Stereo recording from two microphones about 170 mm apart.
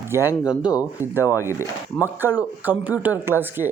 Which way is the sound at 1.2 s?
15° left (ahead or behind).